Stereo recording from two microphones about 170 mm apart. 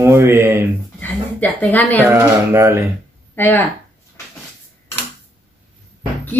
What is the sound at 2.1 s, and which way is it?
Speech, 15° right (ahead or behind).